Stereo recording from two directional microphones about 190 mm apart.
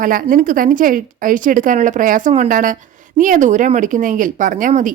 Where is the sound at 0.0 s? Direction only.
45° right (ahead or behind).